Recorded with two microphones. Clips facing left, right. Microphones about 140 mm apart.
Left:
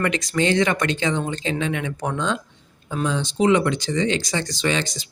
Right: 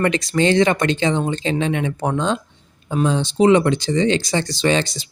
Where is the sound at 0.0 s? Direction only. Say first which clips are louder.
Right 4 dB; 30° right (ahead or behind).